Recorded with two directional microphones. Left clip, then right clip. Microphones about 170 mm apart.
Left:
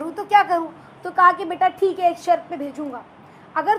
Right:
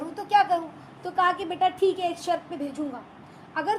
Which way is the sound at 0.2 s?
20° left (ahead or behind).